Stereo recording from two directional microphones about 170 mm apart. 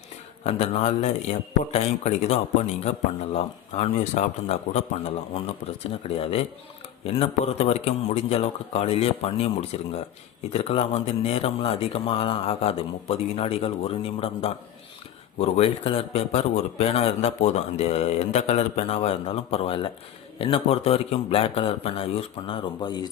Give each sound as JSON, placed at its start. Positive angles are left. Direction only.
{"t": 0.4, "sound": "speech", "side_deg": 40}